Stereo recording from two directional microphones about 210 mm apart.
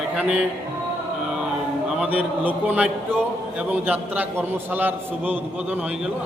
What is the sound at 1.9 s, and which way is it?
Speech, 5° right (ahead or behind).